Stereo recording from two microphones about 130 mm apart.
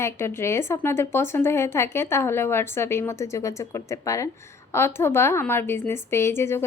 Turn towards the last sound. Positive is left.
turn(degrees=20)  # may be behind; listen again after turning